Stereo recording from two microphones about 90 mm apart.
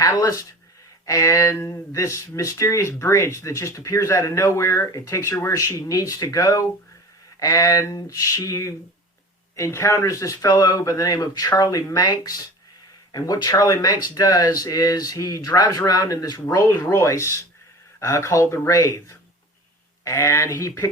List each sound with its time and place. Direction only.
0.0 s speech: 40° left (ahead or behind)